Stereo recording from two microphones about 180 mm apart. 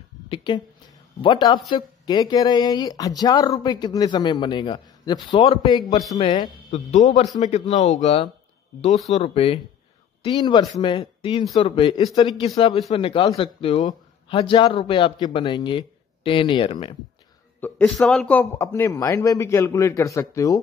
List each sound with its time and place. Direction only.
0.3 s speech: 25° left (ahead or behind)
6.7 s speech: 40° left (ahead or behind)
17.6 s speech: 10° left (ahead or behind)